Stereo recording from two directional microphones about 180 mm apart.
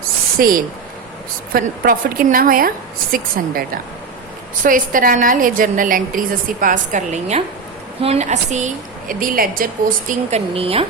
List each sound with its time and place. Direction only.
0.3 s a woman's voice: 50° right (ahead or behind)
4.6 s a woman's voice: 50° right (ahead or behind)
10.1 s a woman's voice: 35° right (ahead or behind)